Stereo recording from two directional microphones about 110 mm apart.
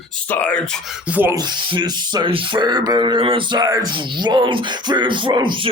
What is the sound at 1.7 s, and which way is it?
Speech, 45° right (ahead or behind).